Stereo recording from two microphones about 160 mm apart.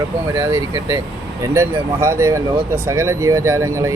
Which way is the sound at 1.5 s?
15° right (ahead or behind).